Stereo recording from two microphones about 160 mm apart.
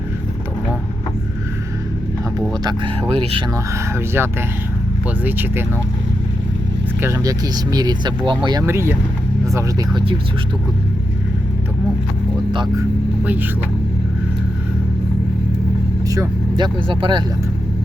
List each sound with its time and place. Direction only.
2.5 s speech: 30° right (ahead or behind)
3.9 s speech: 15° right (ahead or behind)
7.0 s speech: 20° right (ahead or behind)
8.6 s speech: 15° right (ahead or behind)
13.2 s speech: 10° right (ahead or behind)
16.0 s speech: 20° right (ahead or behind)